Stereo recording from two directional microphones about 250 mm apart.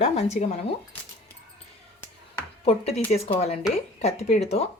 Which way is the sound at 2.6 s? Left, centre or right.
Left.